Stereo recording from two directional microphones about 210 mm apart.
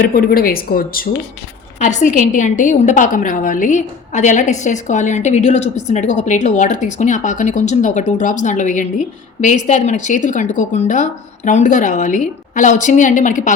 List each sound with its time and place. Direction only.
0.1 s a woman's voice: 45° left (ahead or behind)